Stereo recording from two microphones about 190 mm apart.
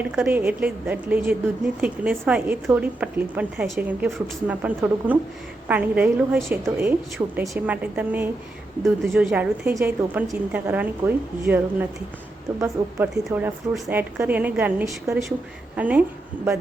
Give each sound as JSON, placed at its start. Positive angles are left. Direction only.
{"t": 0.0, "sound": "a woman's voice", "side_deg": -10}
{"t": 7.2, "sound": "a woman's voice", "side_deg": -20}
{"t": 7.5, "sound": "a woman's voice", "side_deg": -10}